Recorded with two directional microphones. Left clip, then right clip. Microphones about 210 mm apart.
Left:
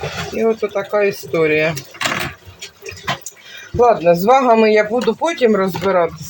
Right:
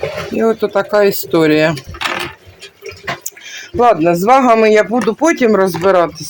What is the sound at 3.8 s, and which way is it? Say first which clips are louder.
Speech: right 1 dB; 50° right (ahead or behind).